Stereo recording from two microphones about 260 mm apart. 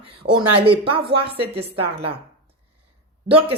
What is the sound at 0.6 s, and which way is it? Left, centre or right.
Speech, right.